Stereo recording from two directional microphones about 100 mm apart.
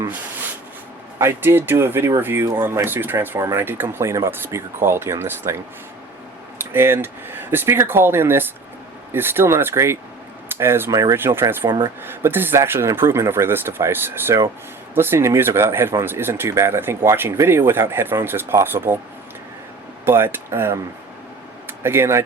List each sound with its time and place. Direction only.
1.2 s speech: 20° right (ahead or behind)
6.6 s speech: 25° right (ahead or behind)
10.9 s speech: 35° right (ahead or behind)
11.2 s speech: 20° right (ahead or behind)
20.1 s speech: 25° right (ahead or behind)